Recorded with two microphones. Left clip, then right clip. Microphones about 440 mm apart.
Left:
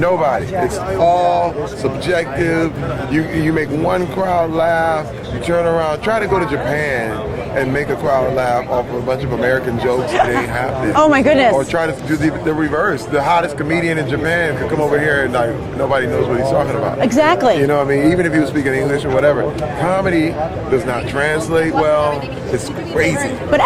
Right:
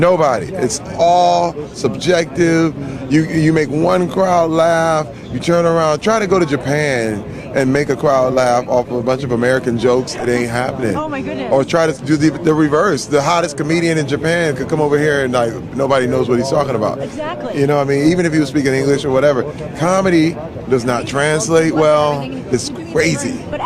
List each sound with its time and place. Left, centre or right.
0.0 s a man's voice: right
10.9 s speech: left
11.5 s a man's voice: right
17.2 s speech: left
17.6 s a man's voice: right